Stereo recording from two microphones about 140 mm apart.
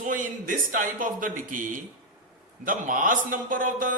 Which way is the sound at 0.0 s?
70° right (ahead or behind).